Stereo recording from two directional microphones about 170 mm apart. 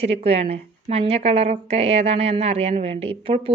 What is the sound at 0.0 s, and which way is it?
A woman's voice, 35° right (ahead or behind).